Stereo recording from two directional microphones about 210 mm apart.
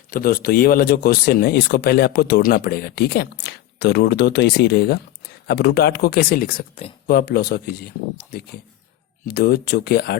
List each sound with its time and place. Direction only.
0.1 s speech: 45° left (ahead or behind)
9.2 s speech: 45° left (ahead or behind)